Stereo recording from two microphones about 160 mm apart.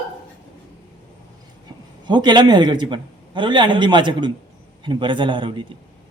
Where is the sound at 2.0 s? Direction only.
30° right (ahead or behind).